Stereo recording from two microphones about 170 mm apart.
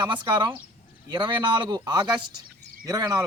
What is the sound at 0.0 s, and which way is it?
A man's voice, 25° right (ahead or behind).